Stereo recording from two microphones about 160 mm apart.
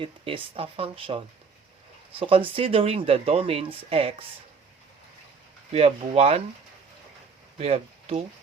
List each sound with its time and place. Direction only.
0.0 s speech: 35° right (ahead or behind)
5.7 s speech: 40° right (ahead or behind)
7.6 s speech: 40° right (ahead or behind)